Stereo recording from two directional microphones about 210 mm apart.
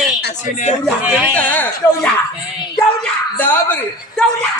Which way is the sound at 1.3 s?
10° left (ahead or behind).